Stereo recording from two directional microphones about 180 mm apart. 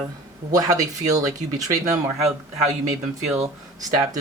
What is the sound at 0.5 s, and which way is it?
Speech, 20° right (ahead or behind).